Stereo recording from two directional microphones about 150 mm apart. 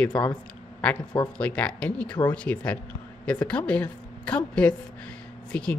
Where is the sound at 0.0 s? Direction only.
5° left (ahead or behind).